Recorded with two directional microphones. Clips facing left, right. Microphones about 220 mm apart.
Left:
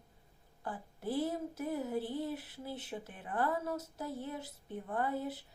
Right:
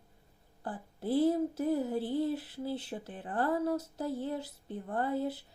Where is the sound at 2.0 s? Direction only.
20° right (ahead or behind).